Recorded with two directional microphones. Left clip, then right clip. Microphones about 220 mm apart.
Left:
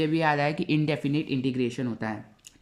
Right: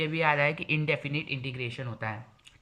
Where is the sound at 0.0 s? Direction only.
25° left (ahead or behind).